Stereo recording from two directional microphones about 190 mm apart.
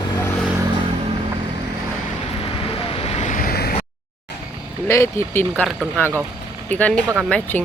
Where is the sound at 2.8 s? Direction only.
35° left (ahead or behind); by 3.7 s 55° left (ahead or behind).